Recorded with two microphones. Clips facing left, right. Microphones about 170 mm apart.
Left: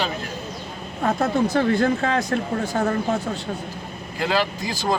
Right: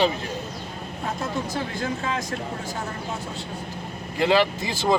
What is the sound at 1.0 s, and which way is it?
Speech, 70° left (ahead or behind).